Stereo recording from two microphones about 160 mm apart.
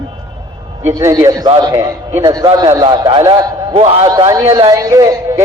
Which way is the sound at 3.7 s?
40° right (ahead or behind).